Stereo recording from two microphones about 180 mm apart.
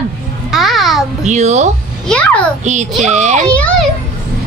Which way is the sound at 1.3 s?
40° right (ahead or behind).